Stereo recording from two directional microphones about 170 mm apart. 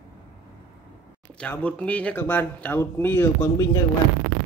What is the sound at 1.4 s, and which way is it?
A man's voice, 5° left (ahead or behind).